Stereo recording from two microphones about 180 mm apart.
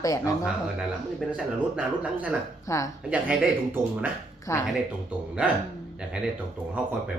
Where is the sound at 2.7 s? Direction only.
15° left (ahead or behind).